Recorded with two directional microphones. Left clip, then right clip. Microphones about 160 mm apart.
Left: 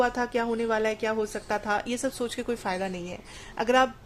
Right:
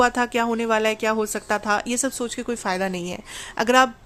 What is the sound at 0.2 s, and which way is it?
A woman's voice, 30° right (ahead or behind).